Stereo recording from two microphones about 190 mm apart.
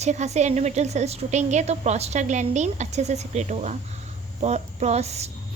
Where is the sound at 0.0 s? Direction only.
35° right (ahead or behind).